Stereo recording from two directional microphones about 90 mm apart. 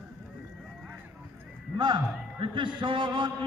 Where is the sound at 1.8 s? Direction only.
60° right (ahead or behind).